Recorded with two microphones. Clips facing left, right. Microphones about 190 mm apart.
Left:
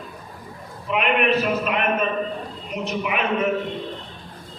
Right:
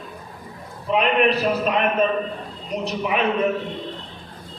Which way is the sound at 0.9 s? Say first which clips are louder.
Right 2 dB; 35° right (ahead or behind).